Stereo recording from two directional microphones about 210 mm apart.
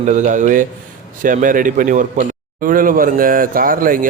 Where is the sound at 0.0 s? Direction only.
35° right (ahead or behind).